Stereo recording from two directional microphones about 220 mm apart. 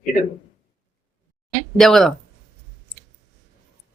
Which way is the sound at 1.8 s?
Centre (ahead or behind).